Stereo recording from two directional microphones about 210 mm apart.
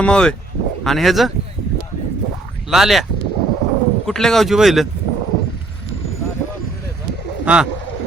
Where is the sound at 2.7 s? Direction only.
Centre (ahead or behind).